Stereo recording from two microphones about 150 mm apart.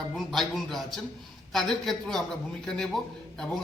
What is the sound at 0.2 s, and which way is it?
Speech, centre (ahead or behind).